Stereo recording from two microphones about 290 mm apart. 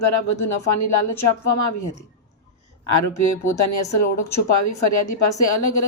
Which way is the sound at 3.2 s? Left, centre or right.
Left.